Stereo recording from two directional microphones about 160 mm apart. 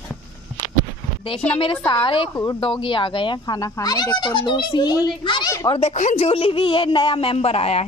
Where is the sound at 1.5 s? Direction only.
35° left (ahead or behind).